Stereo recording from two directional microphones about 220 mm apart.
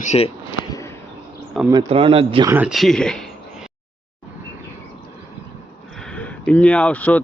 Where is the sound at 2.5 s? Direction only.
5° right (ahead or behind).